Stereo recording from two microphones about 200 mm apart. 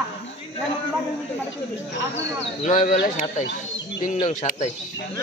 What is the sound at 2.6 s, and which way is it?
Speech, 40° left (ahead or behind).